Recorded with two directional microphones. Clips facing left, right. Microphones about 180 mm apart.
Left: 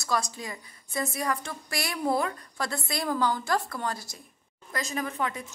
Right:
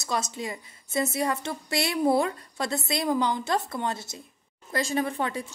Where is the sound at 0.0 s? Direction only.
20° right (ahead or behind).